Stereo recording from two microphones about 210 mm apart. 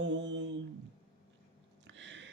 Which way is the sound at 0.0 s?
60° right (ahead or behind).